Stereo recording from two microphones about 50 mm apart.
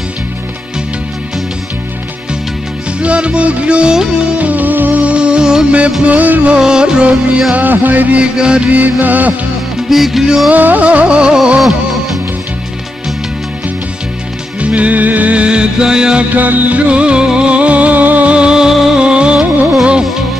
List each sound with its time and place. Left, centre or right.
3.0 s music: right
4.4 s music: right; by 5.7 s centre
6.0 s music: right
6.5 s music: centre
7.5 s music: right
8.2 s music: centre
8.7 s music: right
9.8 s music: centre
10.5 s music: right; by 11.6 s centre
14.6 s music: right
16.3 s music: right